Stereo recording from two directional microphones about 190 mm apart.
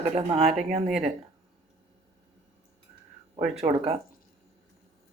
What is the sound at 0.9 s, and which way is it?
Speech, 5° right (ahead or behind).